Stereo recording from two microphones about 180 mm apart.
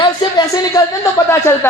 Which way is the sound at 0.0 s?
25° left (ahead or behind).